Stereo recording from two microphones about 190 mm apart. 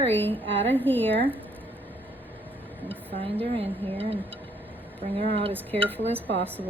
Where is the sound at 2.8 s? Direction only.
30° right (ahead or behind).